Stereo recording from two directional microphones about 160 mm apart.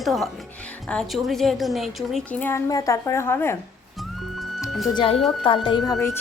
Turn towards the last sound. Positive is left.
turn(degrees=25)  # may be behind; listen again after turning